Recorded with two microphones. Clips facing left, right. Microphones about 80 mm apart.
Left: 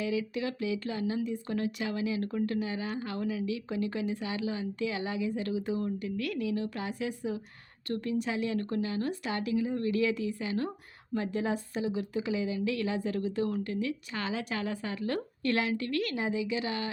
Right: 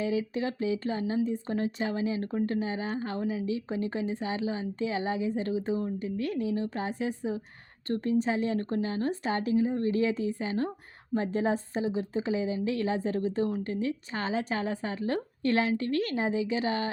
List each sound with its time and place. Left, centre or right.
0.0 s speech: right